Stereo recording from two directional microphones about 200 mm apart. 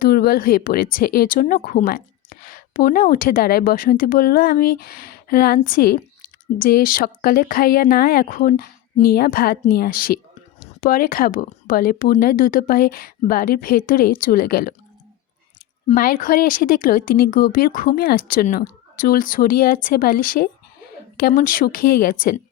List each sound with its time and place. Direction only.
0.0 s a woman's voice: 50° left (ahead or behind)
16.0 s a woman's voice: 45° left (ahead or behind)